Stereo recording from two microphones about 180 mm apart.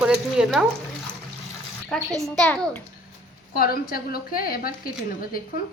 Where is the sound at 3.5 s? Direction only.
55° left (ahead or behind).